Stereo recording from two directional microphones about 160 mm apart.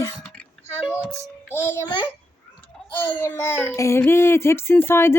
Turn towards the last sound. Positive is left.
turn(degrees=15)  # may be behind; listen again after turning